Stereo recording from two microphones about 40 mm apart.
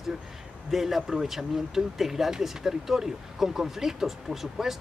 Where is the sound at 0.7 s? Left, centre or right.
Centre.